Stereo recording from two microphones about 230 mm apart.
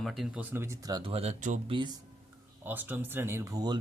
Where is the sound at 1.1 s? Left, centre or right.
Right.